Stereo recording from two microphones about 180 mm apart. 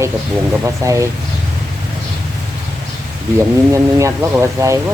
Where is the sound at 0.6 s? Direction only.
15° right (ahead or behind).